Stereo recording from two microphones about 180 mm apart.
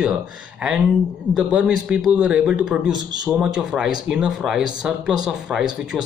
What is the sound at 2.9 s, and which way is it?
Speech, 25° right (ahead or behind).